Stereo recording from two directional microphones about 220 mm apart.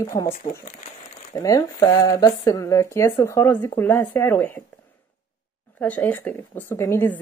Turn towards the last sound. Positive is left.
turn(degrees=10)  # may be behind; listen again after turning